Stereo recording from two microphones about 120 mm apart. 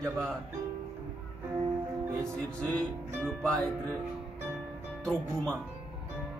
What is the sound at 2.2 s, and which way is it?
Music, 5° left (ahead or behind).